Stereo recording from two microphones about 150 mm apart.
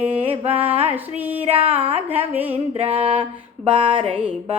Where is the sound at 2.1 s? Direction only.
10° right (ahead or behind).